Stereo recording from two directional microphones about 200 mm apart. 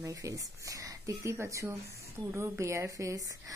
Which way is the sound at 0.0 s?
15° right (ahead or behind).